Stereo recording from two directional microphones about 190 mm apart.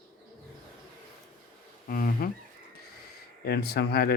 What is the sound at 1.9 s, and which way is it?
Speech, 50° left (ahead or behind).